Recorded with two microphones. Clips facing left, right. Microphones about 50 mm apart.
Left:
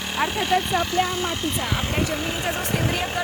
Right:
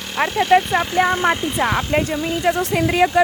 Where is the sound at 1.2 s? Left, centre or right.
Right.